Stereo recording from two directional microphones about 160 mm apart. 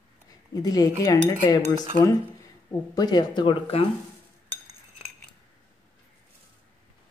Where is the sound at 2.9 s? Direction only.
25° left (ahead or behind).